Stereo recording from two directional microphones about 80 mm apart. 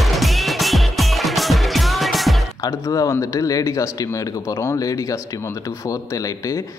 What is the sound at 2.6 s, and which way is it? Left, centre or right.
Speech, left.